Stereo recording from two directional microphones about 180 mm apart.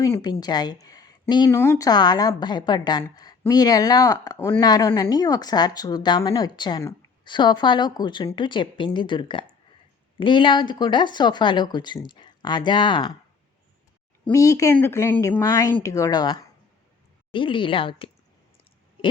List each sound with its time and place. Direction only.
0.1 s a woman's voice: 20° left (ahead or behind)
14.3 s a woman's voice: 20° left (ahead or behind)